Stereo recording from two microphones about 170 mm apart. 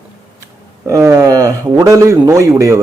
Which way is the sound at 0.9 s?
15° right (ahead or behind).